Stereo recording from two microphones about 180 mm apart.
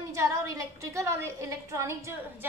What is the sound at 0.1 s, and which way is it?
A woman's voice, 20° right (ahead or behind).